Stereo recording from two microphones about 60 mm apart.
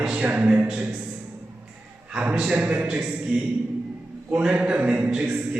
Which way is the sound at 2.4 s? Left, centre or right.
Right.